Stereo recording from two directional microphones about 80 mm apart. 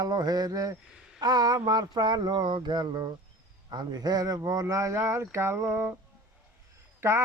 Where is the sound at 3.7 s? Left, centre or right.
Right.